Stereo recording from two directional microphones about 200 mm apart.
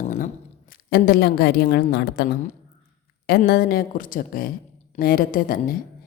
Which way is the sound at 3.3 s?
50° left (ahead or behind).